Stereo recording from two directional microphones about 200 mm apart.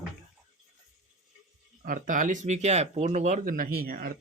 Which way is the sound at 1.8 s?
40° right (ahead or behind).